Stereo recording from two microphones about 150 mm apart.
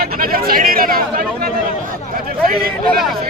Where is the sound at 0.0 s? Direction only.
80° right.